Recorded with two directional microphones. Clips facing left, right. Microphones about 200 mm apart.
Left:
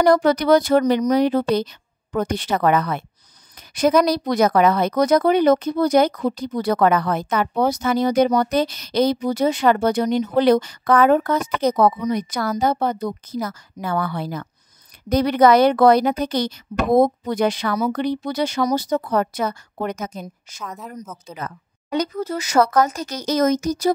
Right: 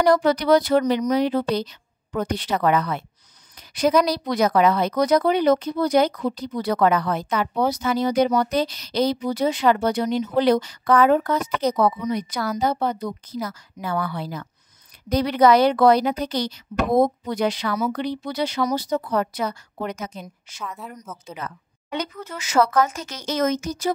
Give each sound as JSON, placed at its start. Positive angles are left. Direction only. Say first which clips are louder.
{"t": 0.0, "sound": "a woman's voice", "louder": "left 2 dB", "side_deg": 50}
{"t": 20.8, "sound": "speech", "louder": "left 3 dB", "side_deg": 0}
{"t": 21.3, "sound": "speech", "louder": "right 1 dB", "side_deg": 40}